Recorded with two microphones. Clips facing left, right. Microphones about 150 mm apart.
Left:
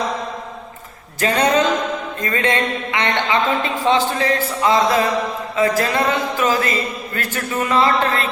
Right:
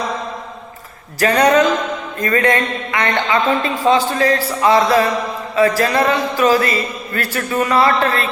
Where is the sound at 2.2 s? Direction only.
25° left (ahead or behind).